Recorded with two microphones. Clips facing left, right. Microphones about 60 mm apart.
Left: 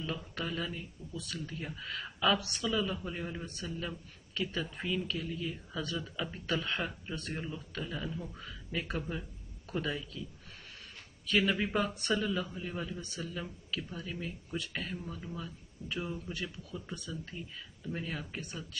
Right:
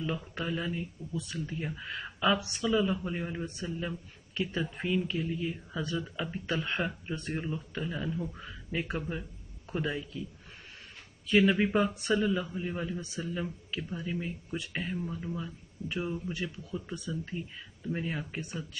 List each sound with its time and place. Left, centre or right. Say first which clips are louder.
0.0 s speech: right 3 dB; right
11.2 s speech: right 5 dB; right